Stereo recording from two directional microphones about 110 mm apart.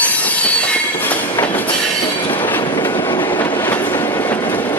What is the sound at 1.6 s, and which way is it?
Train, 50° left (ahead or behind).